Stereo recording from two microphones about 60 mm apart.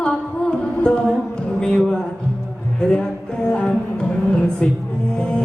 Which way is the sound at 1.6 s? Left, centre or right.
Centre.